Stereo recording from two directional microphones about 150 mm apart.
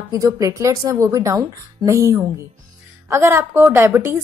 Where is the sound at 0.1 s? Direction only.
20° right (ahead or behind).